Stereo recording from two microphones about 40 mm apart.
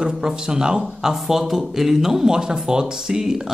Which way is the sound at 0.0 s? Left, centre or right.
Centre.